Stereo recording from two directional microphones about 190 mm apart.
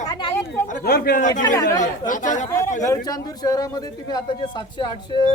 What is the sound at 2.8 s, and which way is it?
A man's voice, 20° left (ahead or behind).